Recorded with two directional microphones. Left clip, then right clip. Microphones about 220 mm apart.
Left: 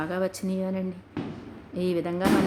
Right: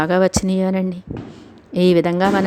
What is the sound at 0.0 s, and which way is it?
A woman's voice, 40° right (ahead or behind).